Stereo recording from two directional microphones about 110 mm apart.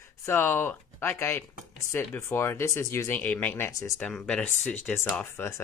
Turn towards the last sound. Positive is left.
turn(degrees=20)  # may be behind; listen again after turning